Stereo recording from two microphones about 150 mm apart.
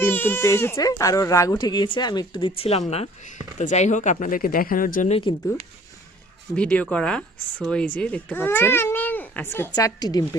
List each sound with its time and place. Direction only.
0.0 s speech: 15° left (ahead or behind); by 5.1 s 65° left (ahead or behind)
6.6 s a child's voice: 10° left (ahead or behind); by 10.2 s 25° left (ahead or behind)